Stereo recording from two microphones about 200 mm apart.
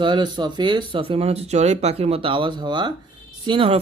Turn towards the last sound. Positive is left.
turn(degrees=-25)  # may be behind; listen again after turning